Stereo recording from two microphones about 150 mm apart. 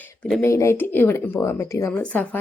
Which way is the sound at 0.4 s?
20° left (ahead or behind).